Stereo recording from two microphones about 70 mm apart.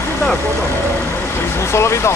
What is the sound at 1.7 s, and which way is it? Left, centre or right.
Speech, left.